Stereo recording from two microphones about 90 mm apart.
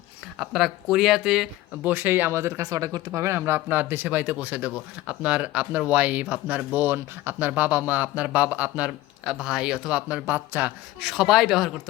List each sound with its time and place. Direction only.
0.3 s speech: 5° right (ahead or behind)
1.8 s speech: 20° right (ahead or behind); by 3.0 s 40° right (ahead or behind)
3.1 s speech: 30° right (ahead or behind)
11.0 s speech: 5° right (ahead or behind)